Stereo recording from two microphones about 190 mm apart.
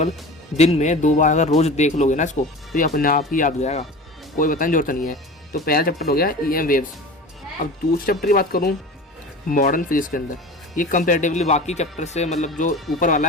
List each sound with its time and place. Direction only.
0.5 s speech: 35° left (ahead or behind)
12.7 s speech: centre (ahead or behind)
13.0 s speech: 40° left (ahead or behind)